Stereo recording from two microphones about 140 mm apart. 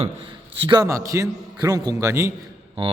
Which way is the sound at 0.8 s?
20° right (ahead or behind).